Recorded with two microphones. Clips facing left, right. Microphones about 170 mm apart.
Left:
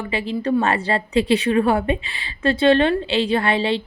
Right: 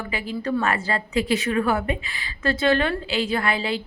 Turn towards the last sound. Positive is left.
turn(degrees=30)  # may be behind; listen again after turning